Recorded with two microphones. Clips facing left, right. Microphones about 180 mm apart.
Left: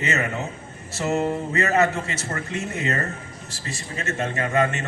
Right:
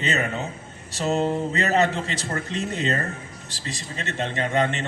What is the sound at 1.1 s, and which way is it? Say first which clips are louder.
Speech: even; 20° right (ahead or behind).